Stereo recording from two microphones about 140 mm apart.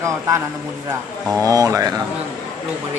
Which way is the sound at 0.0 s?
20° right (ahead or behind).